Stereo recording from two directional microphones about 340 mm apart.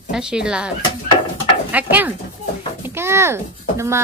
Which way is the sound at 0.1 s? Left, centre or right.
Centre.